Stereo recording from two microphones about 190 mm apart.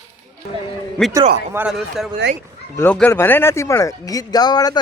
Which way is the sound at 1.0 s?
5° left (ahead or behind).